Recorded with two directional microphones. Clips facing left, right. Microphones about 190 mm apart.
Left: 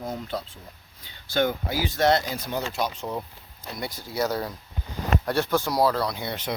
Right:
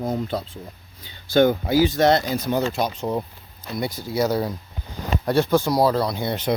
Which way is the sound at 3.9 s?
10° right (ahead or behind).